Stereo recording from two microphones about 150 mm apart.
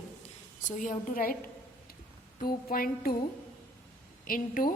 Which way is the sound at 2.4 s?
75° left (ahead or behind).